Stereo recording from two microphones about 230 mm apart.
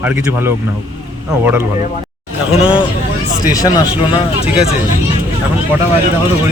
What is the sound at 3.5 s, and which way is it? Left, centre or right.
Speech, centre.